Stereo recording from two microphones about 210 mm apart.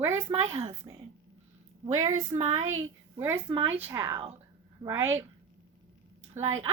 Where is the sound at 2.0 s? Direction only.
30° right (ahead or behind).